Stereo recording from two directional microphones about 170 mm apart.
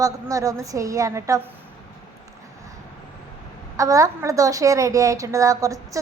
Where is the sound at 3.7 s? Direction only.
20° right (ahead or behind).